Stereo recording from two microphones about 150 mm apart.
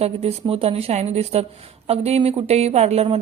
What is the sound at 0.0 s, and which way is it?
Speech, 40° right (ahead or behind).